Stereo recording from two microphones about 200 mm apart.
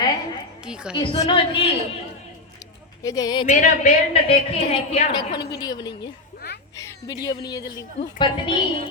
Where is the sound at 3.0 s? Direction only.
20° left (ahead or behind).